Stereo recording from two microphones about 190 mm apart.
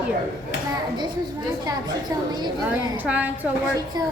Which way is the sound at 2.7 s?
5° right (ahead or behind).